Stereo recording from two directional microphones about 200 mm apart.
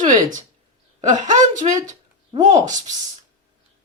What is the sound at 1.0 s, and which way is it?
A woman's voice, 35° right (ahead or behind).